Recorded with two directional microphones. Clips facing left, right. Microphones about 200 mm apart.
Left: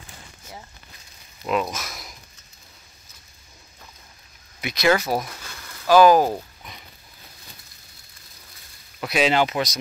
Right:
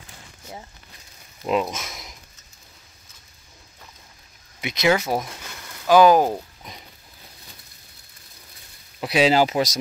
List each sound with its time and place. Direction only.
1.4 s speech: 25° right (ahead or behind)
4.6 s speech: 20° right (ahead or behind)
9.0 s speech: 30° right (ahead or behind)